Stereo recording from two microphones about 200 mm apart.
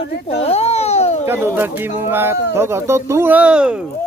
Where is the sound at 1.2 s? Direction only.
10° right (ahead or behind).